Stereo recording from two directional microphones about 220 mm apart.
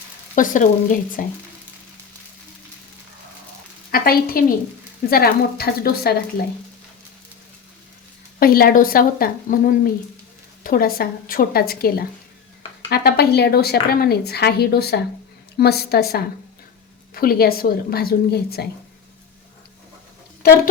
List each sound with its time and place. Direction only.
0.3 s speech: 35° left (ahead or behind)
3.9 s a woman's voice: 40° left (ahead or behind)
8.4 s a woman's voice: 45° left (ahead or behind)